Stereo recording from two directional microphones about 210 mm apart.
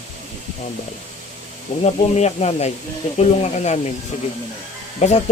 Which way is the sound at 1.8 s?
30° left (ahead or behind).